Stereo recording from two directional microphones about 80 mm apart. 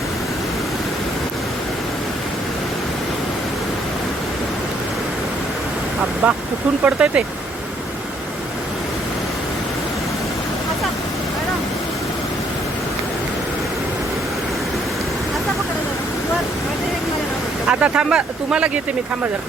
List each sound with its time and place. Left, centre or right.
6.2 s speech: centre
17.7 s speech: centre